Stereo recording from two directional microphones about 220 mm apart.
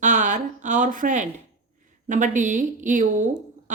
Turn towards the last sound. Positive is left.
turn(degrees=-35)  # may be behind; listen again after turning